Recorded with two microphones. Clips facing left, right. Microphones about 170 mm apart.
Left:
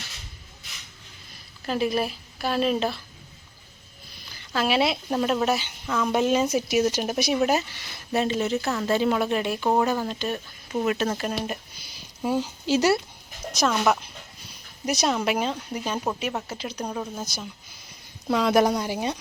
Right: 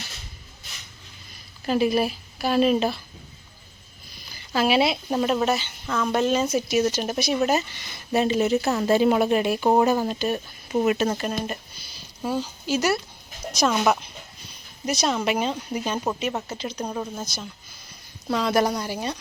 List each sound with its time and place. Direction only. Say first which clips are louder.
1.6 s speech: right 3 dB; 5° right (ahead or behind)
4.5 s a woman's voice: right 2 dB; 5° right (ahead or behind); by 10.8 s 20° right (ahead or behind)
10.8 s speech: right 1 dB; 5° right (ahead or behind)
12.2 s speech: left 2 dB; 20° left (ahead or behind)
13.5 s a woman's voice: right 1 dB; 5° right (ahead or behind)
14.8 s speech: even; 15° left (ahead or behind)
15.1 s speech: right 1 dB; centre (ahead or behind)
16.7 s speech: even; 5° right (ahead or behind)
18.3 s speech: left 2 dB; 15° left (ahead or behind)